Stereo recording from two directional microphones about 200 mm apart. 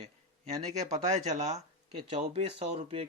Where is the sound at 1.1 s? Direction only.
35° right (ahead or behind).